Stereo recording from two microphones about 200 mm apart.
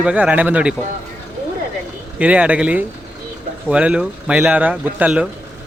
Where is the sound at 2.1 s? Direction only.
5° right (ahead or behind).